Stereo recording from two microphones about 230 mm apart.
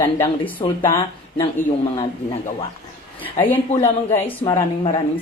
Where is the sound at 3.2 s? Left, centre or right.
Centre.